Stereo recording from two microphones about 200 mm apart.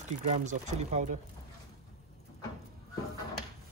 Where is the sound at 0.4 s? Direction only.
35° right (ahead or behind).